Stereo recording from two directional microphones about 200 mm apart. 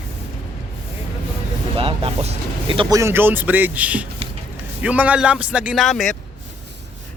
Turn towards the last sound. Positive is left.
turn(degrees=0)  # may be behind; listen again after turning